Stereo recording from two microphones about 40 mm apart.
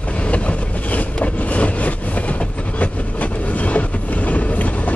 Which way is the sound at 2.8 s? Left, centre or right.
Left.